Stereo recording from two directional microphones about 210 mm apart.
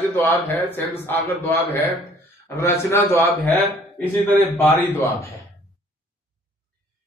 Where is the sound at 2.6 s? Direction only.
10° left (ahead or behind).